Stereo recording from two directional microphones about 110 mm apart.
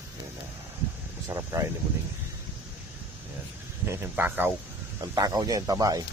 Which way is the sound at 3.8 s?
20° right (ahead or behind).